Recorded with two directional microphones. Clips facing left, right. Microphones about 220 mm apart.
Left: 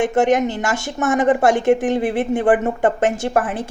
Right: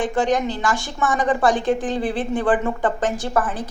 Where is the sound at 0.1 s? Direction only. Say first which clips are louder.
Left 4 dB; 25° left (ahead or behind).